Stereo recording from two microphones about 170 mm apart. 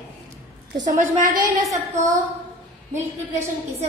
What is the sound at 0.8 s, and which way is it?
Speech, 50° right (ahead or behind).